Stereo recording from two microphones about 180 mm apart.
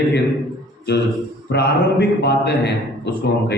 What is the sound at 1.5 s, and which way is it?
A man's voice, 65° left (ahead or behind).